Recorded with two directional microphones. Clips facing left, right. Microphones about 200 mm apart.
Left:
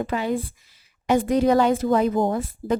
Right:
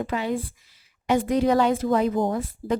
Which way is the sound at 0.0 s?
45° left (ahead or behind).